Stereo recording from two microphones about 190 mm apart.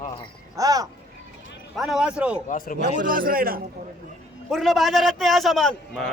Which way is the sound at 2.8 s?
45° right (ahead or behind).